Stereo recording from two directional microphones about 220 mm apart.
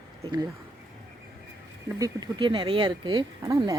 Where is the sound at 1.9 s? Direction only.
15° right (ahead or behind).